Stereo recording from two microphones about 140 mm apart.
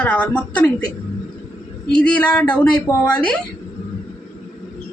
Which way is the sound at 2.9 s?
25° left (ahead or behind).